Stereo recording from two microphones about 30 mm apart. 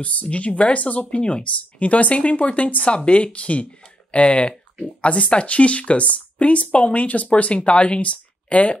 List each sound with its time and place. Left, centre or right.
0.0 s speech: left